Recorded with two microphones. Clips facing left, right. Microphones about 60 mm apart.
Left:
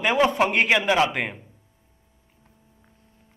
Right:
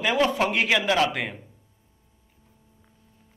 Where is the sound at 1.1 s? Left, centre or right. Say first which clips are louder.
Left 2 dB; centre.